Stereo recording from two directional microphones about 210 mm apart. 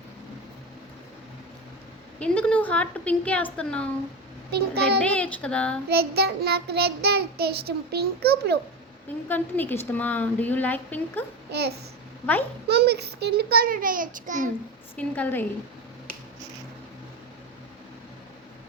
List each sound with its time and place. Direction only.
2.1 s a woman's voice: 5° left (ahead or behind)
4.5 s a child's voice: 50° right (ahead or behind)
4.9 s a woman's voice: 5° left (ahead or behind)
5.9 s a child's voice: 50° right (ahead or behind)
9.3 s a woman's voice: 10° left (ahead or behind)
11.5 s a child's voice: 50° right (ahead or behind)
14.9 s a woman's voice: 5° left (ahead or behind)